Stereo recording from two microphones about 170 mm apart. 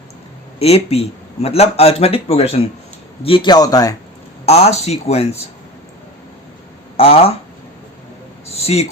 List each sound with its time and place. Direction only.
0.6 s a man's voice: 35° left (ahead or behind); by 3.9 s 20° left (ahead or behind)
4.4 s speech: 35° left (ahead or behind)
6.9 s speech: 35° left (ahead or behind)
8.4 s a sound: 35° left (ahead or behind)